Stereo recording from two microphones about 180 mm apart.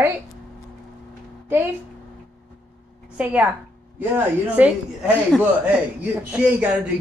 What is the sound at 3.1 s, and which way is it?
A man's voice, 10° right (ahead or behind).